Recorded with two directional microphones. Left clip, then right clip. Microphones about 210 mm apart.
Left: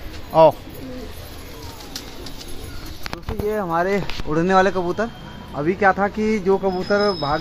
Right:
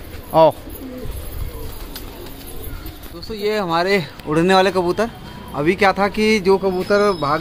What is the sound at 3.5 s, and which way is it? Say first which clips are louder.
Speech: right 3 dB; 20° right (ahead or behind).